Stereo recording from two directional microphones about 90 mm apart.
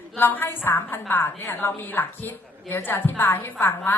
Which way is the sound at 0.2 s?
20° left (ahead or behind).